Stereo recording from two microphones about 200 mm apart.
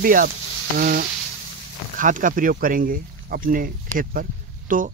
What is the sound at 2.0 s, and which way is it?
Speech, 40° right (ahead or behind).